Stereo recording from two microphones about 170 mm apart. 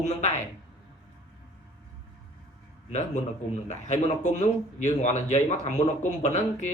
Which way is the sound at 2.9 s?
45° left (ahead or behind).